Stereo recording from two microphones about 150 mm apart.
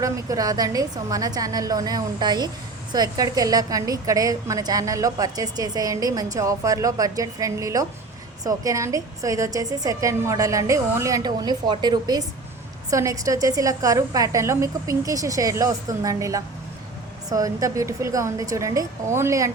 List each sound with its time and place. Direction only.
0.0 s a woman's voice: 25° right (ahead or behind)